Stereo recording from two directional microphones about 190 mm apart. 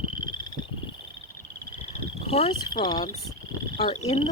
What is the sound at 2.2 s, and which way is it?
Speech, 30° left (ahead or behind).